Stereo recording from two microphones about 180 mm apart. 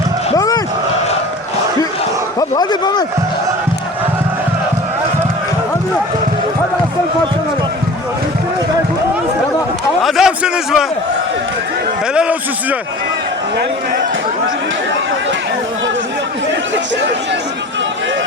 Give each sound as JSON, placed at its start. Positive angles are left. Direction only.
{"t": 0.3, "sound": "crowd", "side_deg": 20}
{"t": 2.4, "sound": "speech", "side_deg": 20}
{"t": 10.0, "sound": "a man's voice", "side_deg": 0}
{"t": 12.1, "sound": "a man's voice", "side_deg": -5}